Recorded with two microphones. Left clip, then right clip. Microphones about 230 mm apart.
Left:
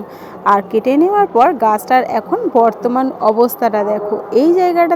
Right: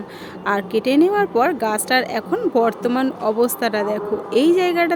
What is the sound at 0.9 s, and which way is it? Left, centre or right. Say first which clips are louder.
A woman's voice: left 4 dB; centre.